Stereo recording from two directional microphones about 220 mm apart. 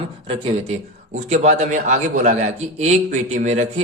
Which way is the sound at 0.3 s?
30° right (ahead or behind).